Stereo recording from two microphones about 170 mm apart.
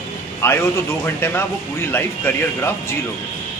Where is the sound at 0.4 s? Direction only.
15° left (ahead or behind).